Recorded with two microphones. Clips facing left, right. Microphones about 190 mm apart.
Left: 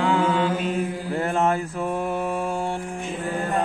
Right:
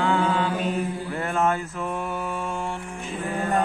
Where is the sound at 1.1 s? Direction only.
35° left (ahead or behind).